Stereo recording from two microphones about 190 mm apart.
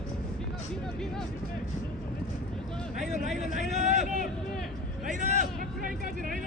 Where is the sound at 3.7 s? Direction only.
35° right (ahead or behind).